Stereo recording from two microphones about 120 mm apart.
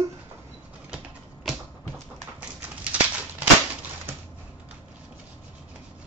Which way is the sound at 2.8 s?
10° right (ahead or behind).